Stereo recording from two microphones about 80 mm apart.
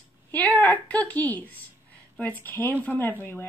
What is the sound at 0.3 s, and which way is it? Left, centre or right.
A woman's voice, left.